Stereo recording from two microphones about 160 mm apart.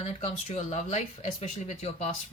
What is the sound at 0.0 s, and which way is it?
Speech, 45° left (ahead or behind).